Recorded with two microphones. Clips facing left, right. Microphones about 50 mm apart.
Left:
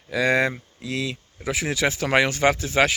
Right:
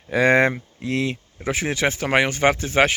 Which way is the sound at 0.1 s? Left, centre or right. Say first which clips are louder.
Right 4 dB; right.